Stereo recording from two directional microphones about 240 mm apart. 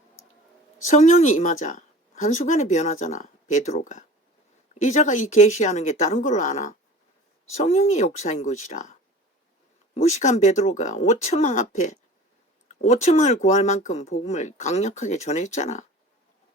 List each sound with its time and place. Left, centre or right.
0.9 s speech: left